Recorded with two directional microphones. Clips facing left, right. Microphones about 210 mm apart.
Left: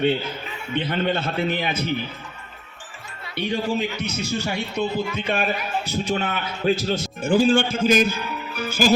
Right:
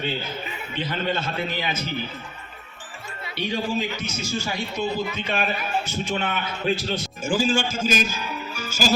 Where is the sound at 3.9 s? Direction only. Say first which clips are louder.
Left 2 dB; 60° left (ahead or behind).